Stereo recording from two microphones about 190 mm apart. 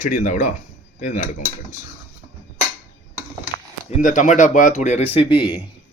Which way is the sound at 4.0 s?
40° left (ahead or behind).